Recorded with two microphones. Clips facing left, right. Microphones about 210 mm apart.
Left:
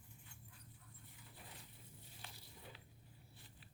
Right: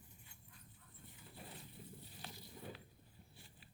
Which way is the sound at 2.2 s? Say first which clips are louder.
Right 7 dB; 45° right (ahead or behind).